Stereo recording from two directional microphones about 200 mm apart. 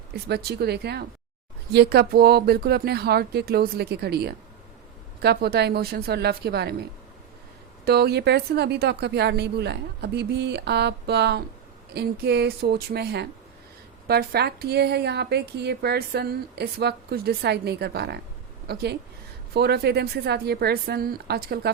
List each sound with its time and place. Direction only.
0.1 s speech: 55° right (ahead or behind)
7.9 s a woman's voice: 50° right (ahead or behind)